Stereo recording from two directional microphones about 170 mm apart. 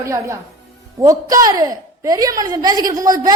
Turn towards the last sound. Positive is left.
turn(degrees=-20)  # may be behind; listen again after turning